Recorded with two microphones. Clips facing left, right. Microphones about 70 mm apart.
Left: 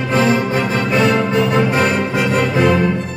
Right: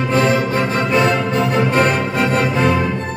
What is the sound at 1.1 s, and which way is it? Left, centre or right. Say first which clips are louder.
Music: left 2 dB; centre.